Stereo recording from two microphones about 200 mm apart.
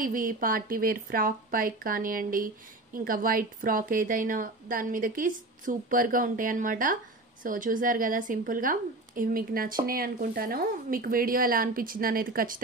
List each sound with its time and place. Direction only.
0.0 s speech: 45° right (ahead or behind)